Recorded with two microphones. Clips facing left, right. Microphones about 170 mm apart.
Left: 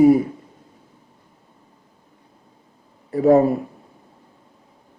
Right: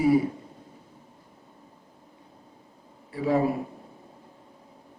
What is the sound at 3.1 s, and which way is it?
Speech, 45° left (ahead or behind).